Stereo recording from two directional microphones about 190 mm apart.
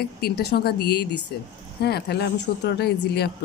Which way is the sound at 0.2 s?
55° left (ahead or behind).